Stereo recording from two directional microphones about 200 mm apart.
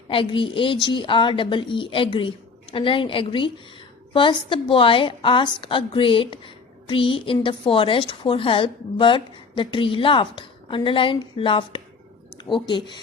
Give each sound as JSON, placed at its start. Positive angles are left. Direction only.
{"t": 0.1, "sound": "a woman's voice", "side_deg": 25}